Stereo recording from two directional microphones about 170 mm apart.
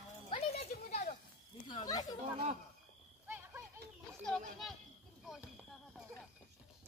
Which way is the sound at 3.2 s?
10° right (ahead or behind).